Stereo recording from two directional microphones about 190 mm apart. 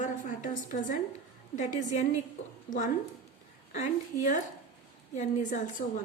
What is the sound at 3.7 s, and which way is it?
A woman's voice, 40° left (ahead or behind).